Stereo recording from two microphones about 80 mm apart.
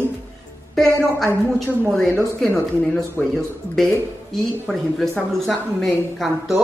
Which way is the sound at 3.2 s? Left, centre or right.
Centre.